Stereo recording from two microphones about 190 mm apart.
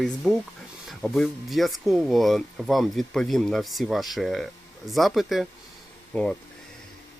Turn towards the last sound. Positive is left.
turn(degrees=5)  # may be behind; listen again after turning